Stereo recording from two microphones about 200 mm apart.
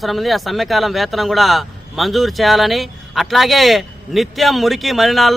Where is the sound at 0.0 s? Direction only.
Centre (ahead or behind).